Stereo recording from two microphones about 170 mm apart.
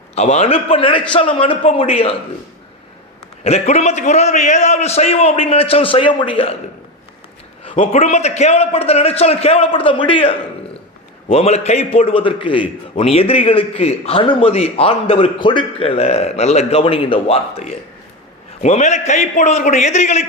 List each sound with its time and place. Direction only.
0.2 s a man's voice: 40° left (ahead or behind)
3.4 s a man's voice: 40° left (ahead or behind)
7.6 s a man's voice: 35° left (ahead or behind)